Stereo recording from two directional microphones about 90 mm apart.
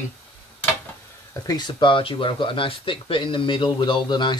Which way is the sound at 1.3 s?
45° left (ahead or behind).